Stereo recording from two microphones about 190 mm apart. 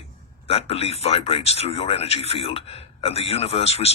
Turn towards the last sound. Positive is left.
turn(degrees=30)  # may be behind; listen again after turning